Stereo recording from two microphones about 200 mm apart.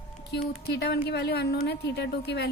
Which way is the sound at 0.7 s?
55° left (ahead or behind).